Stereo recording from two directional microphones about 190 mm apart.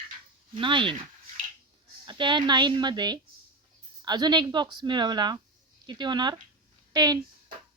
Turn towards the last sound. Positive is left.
turn(degrees=-20)  # may be behind; listen again after turning